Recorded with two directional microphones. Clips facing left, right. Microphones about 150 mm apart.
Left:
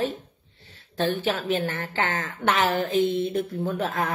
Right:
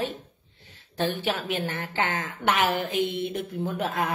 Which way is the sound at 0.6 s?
15° right (ahead or behind).